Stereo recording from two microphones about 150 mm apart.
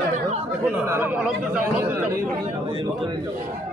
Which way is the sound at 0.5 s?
10° right (ahead or behind).